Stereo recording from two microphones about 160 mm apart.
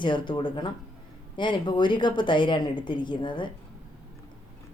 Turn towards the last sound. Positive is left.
turn(degrees=30)  # may be behind; listen again after turning